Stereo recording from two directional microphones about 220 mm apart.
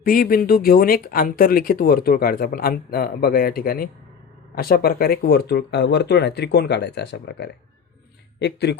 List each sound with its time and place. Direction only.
0.0 s speech: 40° left (ahead or behind)